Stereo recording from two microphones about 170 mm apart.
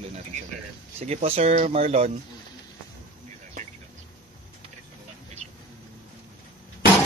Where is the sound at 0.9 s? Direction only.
40° right (ahead or behind).